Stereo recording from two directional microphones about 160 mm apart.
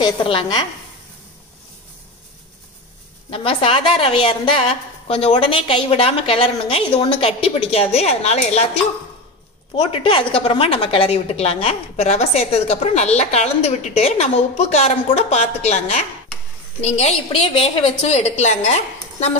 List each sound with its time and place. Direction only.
0.0 s a woman's voice: 30° left (ahead or behind)
3.3 s a woman's voice: 35° left (ahead or behind)
9.8 s a woman's voice: 35° left (ahead or behind)